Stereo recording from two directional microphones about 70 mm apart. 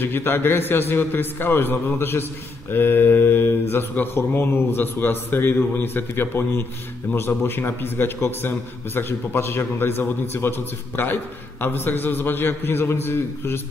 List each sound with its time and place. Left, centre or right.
0.0 s speech: left